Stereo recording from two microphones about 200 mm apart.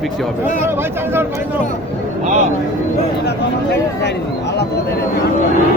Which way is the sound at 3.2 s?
60° left (ahead or behind).